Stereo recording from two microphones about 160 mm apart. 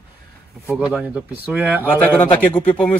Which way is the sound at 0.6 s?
10° right (ahead or behind).